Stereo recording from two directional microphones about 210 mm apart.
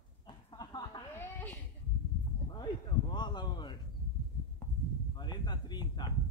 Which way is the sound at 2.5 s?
20° left (ahead or behind).